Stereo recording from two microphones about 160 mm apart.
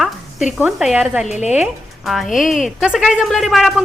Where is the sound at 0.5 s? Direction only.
5° right (ahead or behind).